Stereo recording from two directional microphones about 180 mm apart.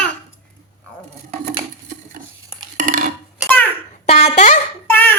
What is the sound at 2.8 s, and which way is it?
Cutlery, 45° right (ahead or behind).